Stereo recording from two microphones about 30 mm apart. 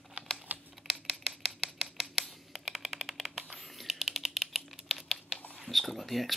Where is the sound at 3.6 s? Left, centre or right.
Centre.